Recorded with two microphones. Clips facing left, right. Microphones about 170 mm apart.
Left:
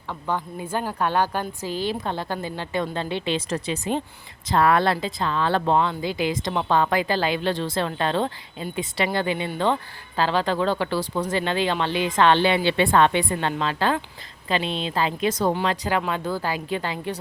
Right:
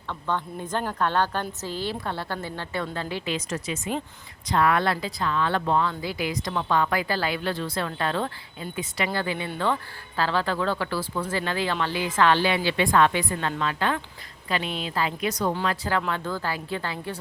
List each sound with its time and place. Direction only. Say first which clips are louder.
0.1 s a woman's voice: left 1 dB; 10° left (ahead or behind)